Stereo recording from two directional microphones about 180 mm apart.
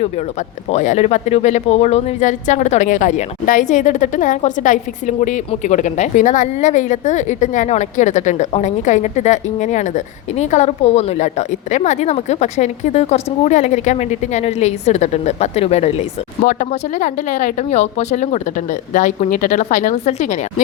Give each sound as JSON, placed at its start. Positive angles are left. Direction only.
{"t": 0.7, "sound": "speech", "side_deg": 40}